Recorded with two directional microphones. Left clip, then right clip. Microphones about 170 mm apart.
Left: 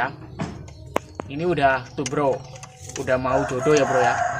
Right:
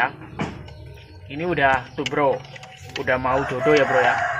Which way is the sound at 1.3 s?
55° left (ahead or behind).